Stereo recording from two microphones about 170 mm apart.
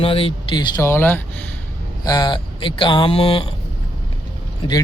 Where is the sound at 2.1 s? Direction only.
25° left (ahead or behind).